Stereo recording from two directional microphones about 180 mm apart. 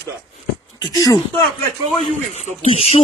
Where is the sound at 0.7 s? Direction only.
20° left (ahead or behind).